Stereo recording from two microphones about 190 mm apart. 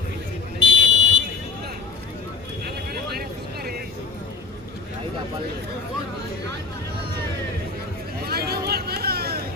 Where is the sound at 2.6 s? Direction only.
55° right (ahead or behind).